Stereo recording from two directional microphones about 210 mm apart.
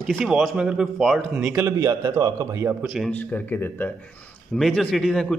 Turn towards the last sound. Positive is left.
turn(degrees=0)  # may be behind; listen again after turning